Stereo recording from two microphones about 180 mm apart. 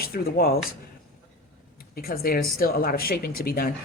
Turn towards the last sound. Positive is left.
turn(degrees=55)  # may be behind; listen again after turning